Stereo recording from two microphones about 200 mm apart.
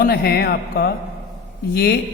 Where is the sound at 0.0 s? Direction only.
50° left (ahead or behind).